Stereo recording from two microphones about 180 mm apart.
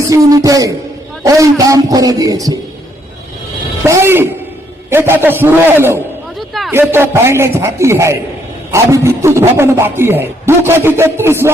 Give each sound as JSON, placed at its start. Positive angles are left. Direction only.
{"t": 0.1, "sound": "a man's voice", "side_deg": -20}
{"t": 3.8, "sound": "a man's voice", "side_deg": -15}